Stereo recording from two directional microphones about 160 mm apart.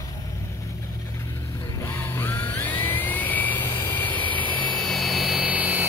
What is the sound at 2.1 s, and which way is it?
Music, 15° left (ahead or behind).